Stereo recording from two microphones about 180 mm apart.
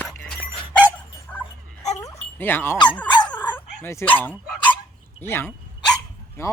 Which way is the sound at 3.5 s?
10° left (ahead or behind).